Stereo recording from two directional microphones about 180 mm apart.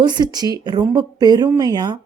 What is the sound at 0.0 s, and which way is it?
Speech, 25° right (ahead or behind).